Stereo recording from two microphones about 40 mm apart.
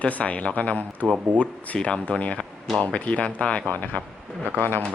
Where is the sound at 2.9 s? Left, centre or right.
Left.